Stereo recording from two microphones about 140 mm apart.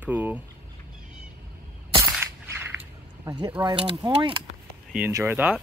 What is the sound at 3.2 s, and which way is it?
Speech, 35° right (ahead or behind).